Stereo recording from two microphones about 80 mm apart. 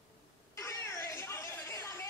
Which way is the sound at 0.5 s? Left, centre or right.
Left.